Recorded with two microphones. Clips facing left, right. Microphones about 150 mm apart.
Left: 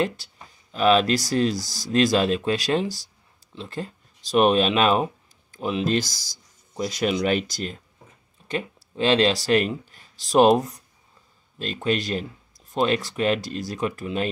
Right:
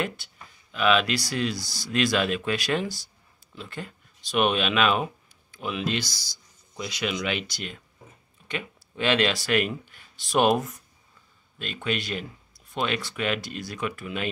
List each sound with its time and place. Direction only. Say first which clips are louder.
0.0 s speech: left 5 dB; 30° left (ahead or behind)
8.9 s speech: left 4 dB; 30° left (ahead or behind)